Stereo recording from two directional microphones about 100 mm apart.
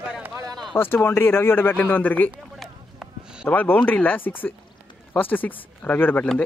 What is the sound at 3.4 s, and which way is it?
Speech, 20° left (ahead or behind).